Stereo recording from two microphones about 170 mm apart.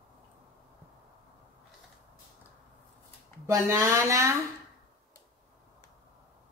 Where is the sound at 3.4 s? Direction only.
15° right (ahead or behind).